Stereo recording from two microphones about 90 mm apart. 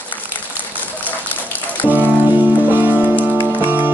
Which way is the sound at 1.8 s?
20° right (ahead or behind).